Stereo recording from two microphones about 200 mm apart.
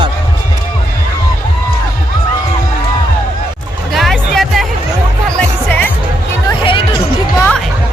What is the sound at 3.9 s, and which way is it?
Music, centre (ahead or behind).